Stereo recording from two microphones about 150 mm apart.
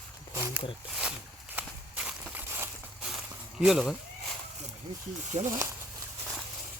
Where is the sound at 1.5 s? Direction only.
5° right (ahead or behind).